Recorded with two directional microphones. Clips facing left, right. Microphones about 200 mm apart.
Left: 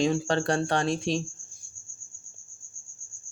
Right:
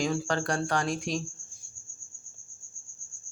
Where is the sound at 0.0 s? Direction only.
25° left (ahead or behind).